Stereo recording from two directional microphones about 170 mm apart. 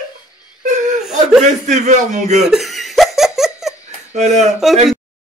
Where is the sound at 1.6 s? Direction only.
45° right (ahead or behind).